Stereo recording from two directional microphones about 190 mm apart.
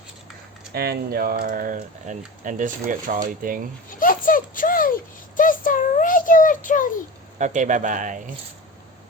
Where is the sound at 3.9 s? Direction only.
45° left (ahead or behind).